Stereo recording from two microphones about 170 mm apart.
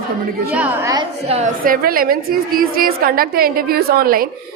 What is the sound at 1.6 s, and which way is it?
A man's voice, 55° right (ahead or behind).